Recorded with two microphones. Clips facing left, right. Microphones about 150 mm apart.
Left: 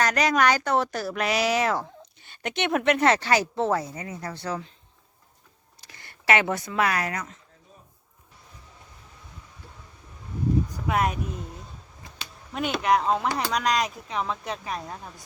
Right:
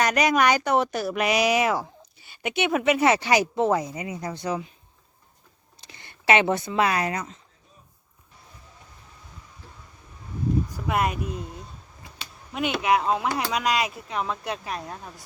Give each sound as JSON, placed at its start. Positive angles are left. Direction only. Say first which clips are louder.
{"t": 0.0, "sound": "speech", "louder": "right 1 dB", "side_deg": -15}
{"t": 5.8, "sound": "speech", "louder": "right 3 dB", "side_deg": -20}
{"t": 10.9, "sound": "speech", "louder": "even", "side_deg": 0}
{"t": 12.5, "sound": "speech", "louder": "even", "side_deg": -5}